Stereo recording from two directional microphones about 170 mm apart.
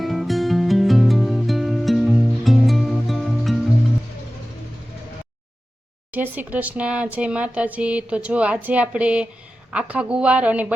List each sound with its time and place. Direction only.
0.0 s music: centre (ahead or behind)
6.1 s speech: 10° right (ahead or behind)